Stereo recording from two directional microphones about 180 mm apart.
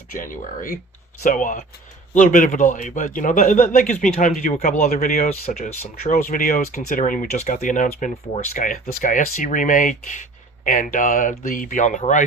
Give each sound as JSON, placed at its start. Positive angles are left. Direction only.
{"t": 0.2, "sound": "speech", "side_deg": 50}